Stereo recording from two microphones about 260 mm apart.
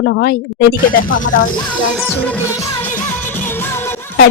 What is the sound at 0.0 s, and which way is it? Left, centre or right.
Speech, left.